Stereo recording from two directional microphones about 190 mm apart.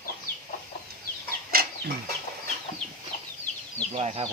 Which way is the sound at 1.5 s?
50° right (ahead or behind).